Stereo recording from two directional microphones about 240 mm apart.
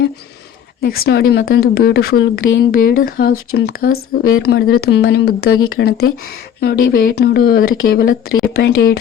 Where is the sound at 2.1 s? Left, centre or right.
Left.